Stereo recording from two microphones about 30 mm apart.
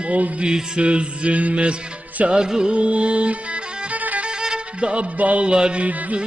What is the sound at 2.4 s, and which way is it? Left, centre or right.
Music, right.